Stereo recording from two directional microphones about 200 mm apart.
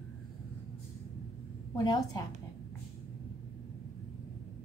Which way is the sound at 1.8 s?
20° left (ahead or behind).